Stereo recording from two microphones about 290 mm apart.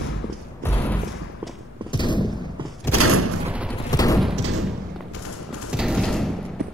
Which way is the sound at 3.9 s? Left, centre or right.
Centre.